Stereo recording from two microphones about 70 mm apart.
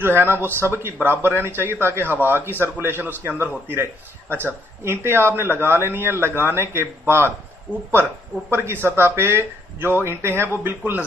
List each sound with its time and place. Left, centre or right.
0.0 s a man's voice: right
8.5 s a man's voice: right